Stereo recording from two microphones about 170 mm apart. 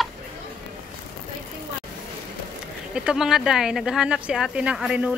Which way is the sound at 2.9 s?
5° right (ahead or behind).